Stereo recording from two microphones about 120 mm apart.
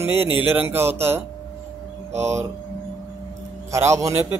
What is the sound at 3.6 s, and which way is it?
Speech, 25° right (ahead or behind).